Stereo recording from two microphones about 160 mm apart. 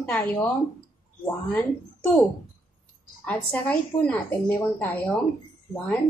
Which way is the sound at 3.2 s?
10° left (ahead or behind).